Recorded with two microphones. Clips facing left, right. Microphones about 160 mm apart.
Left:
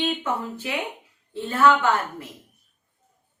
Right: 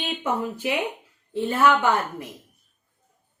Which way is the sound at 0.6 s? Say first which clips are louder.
Right 5 dB; 15° right (ahead or behind).